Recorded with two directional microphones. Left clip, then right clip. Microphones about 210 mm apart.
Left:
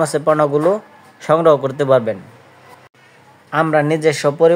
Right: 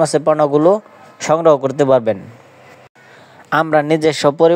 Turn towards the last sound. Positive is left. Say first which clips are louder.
# right 1 dB
turn(degrees=-35)  # may be behind; listen again after turning